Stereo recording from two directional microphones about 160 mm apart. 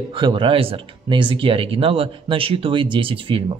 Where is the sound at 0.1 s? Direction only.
30° right (ahead or behind).